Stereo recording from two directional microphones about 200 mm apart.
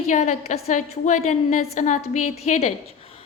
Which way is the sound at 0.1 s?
35° left (ahead or behind).